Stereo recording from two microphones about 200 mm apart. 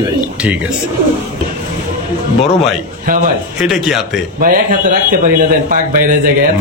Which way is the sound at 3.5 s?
Centre (ahead or behind).